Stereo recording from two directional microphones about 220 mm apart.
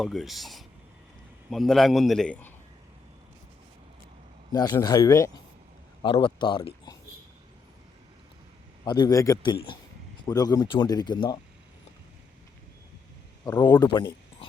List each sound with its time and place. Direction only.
0.0 s a man's voice: centre (ahead or behind)
4.5 s speech: 20° left (ahead or behind)
8.8 s speech: 20° left (ahead or behind)
13.4 s speech: 15° left (ahead or behind)